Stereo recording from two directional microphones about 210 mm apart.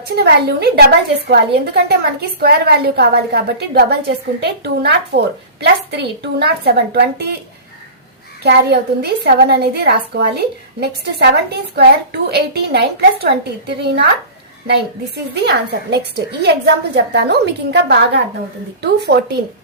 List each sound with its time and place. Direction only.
0.2 s a woman's voice: 50° right (ahead or behind)
8.4 s a woman's voice: 50° right (ahead or behind)